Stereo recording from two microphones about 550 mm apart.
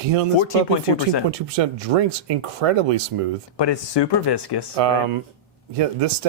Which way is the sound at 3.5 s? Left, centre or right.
Left.